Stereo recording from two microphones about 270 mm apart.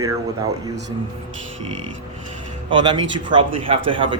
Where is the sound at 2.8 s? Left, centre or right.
Centre.